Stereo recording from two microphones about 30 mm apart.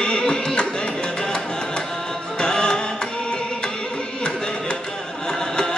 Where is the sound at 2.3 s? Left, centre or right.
Left.